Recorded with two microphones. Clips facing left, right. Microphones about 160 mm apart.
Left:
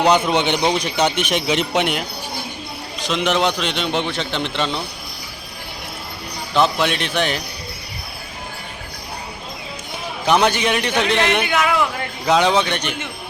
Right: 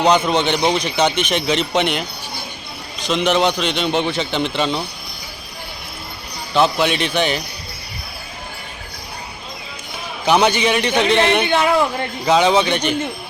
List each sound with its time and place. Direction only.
0.0 s a man's voice: 5° left (ahead or behind)
6.5 s a man's voice: centre (ahead or behind)
10.2 s a man's voice: centre (ahead or behind)
11.4 s speech: 30° right (ahead or behind)
12.2 s a man's voice: centre (ahead or behind)